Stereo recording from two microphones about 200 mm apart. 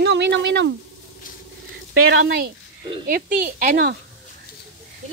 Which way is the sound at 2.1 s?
70° right (ahead or behind).